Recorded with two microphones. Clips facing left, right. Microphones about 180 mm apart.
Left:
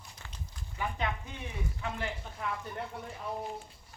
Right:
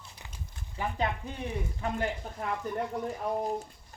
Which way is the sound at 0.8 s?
35° right (ahead or behind).